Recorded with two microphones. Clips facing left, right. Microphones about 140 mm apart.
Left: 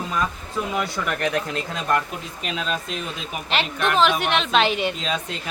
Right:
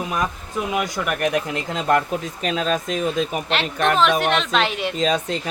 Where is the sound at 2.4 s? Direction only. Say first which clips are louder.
Right 5 dB; 45° right (ahead or behind).